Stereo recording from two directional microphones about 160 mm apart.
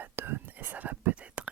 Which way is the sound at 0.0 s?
15° right (ahead or behind).